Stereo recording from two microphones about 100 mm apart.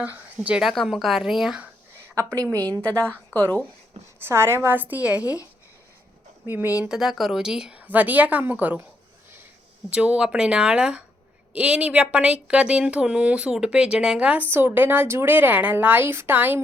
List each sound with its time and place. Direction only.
0.0 s speech: 10° right (ahead or behind)
3.3 s a woman's voice: 20° right (ahead or behind)
6.4 s a woman's voice: 20° right (ahead or behind)
9.9 s a woman's voice: 10° right (ahead or behind)